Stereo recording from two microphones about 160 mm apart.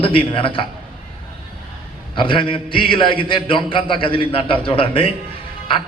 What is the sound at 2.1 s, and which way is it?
A man's voice, 30° left (ahead or behind).